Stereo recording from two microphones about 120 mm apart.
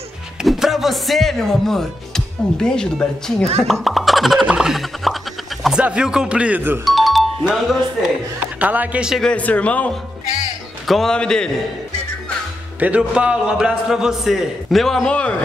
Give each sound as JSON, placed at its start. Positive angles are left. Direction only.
{"t": 0.4, "sound": "speech", "side_deg": -5}
{"t": 6.8, "sound": "music", "side_deg": 0}
{"t": 8.5, "sound": "a woman's voice", "side_deg": -15}
{"t": 9.2, "sound": "a man's voice", "side_deg": 10}
{"t": 12.8, "sound": "a man's voice", "side_deg": -10}